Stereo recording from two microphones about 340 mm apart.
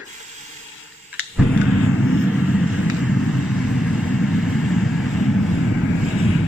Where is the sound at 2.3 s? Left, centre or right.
Centre.